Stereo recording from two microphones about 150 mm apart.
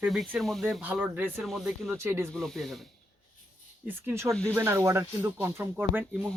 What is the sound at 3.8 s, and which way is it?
Speech, 15° right (ahead or behind).